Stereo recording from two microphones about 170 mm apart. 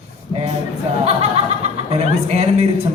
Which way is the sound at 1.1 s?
35° right (ahead or behind).